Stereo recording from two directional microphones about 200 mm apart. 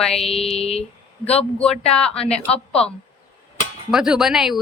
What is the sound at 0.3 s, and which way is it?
Speech, 30° left (ahead or behind).